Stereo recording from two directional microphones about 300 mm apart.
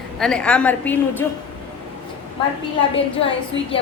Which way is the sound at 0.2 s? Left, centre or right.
Centre.